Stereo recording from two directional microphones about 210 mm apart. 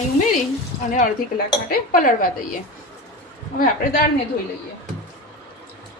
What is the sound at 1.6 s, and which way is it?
Speech, 40° left (ahead or behind).